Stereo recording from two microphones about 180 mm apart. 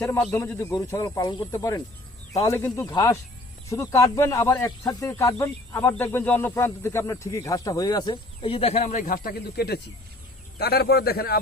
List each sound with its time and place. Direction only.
0.2 s a man's voice: 10° left (ahead or behind); by 11.3 s 60° left (ahead or behind)